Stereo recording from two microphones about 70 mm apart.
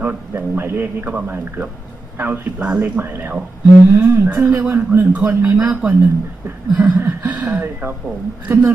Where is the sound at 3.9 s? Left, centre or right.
Right.